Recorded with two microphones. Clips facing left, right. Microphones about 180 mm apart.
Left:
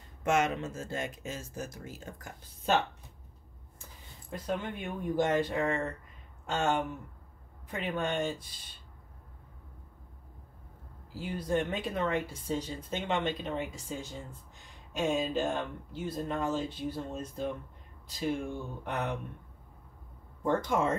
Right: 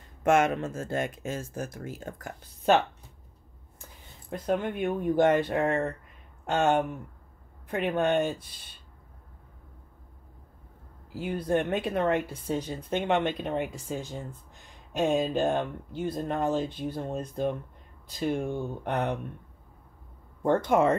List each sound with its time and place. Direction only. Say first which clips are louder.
0.2 s speech: right 5 dB; 55° right (ahead or behind)
4.5 s speech: right 8 dB; 55° right (ahead or behind)
11.1 s speech: right 4 dB; 60° right (ahead or behind)
20.4 s speech: right 6 dB; 60° right (ahead or behind)